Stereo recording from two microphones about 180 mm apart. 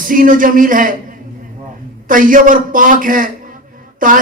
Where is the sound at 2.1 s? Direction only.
50° right (ahead or behind).